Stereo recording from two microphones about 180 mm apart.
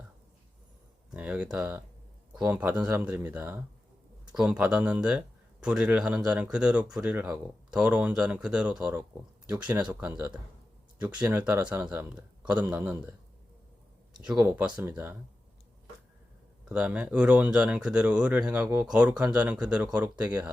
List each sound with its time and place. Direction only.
1.1 s speech: 5° right (ahead or behind)
14.2 s speech: 10° right (ahead or behind)
16.6 s speech: 5° right (ahead or behind)